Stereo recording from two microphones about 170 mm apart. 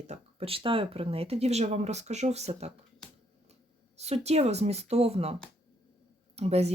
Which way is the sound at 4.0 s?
40° right (ahead or behind).